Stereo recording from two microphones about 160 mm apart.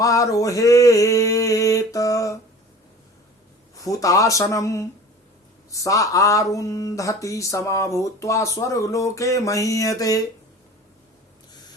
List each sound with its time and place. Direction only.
0.0 s speech: 20° left (ahead or behind)
3.8 s speech: 20° left (ahead or behind)